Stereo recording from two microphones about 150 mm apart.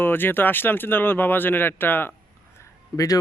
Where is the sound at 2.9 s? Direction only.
25° left (ahead or behind).